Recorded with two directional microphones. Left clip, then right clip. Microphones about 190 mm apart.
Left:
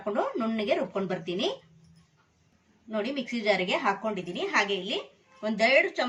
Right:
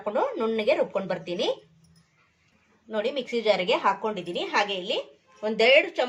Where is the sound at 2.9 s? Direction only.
25° right (ahead or behind).